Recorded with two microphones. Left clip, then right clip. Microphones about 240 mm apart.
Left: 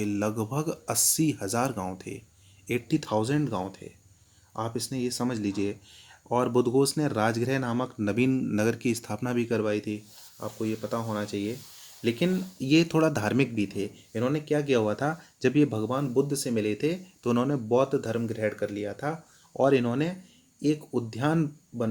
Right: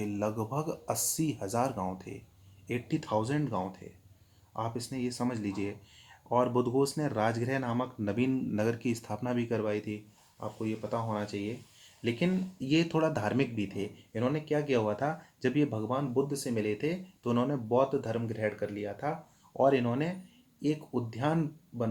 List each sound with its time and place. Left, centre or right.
0.0 s speech: left